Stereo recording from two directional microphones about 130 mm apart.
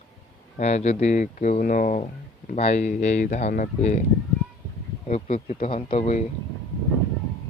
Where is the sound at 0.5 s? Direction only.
60° left (ahead or behind); by 2.0 s 80° left.